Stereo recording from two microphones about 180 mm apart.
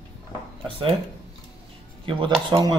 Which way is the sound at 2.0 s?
30° right (ahead or behind).